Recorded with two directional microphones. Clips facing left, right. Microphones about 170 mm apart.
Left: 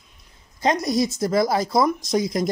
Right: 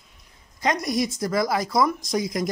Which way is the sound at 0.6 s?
25° left (ahead or behind).